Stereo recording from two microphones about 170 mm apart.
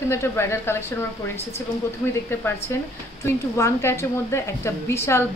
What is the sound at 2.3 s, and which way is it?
A woman's voice, 15° left (ahead or behind).